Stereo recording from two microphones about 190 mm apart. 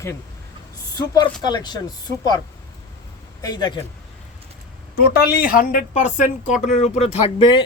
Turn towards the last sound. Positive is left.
turn(degrees=25)  # may be behind; listen again after turning